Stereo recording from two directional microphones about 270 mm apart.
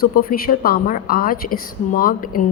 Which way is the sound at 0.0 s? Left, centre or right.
Left.